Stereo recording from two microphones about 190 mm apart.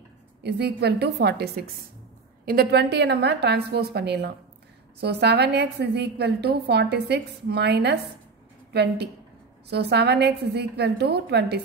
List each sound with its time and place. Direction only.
0.4 s a woman's voice: 60° right (ahead or behind)